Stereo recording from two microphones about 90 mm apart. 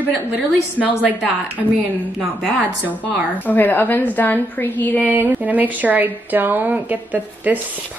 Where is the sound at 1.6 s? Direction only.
Centre (ahead or behind).